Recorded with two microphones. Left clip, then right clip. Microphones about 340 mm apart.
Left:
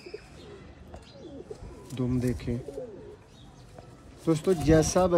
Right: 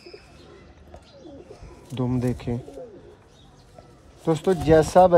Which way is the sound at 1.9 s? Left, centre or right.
Centre.